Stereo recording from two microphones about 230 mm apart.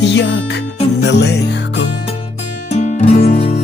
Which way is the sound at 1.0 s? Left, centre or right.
Left.